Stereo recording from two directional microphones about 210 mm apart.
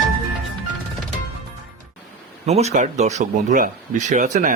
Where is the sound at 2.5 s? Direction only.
30° right (ahead or behind).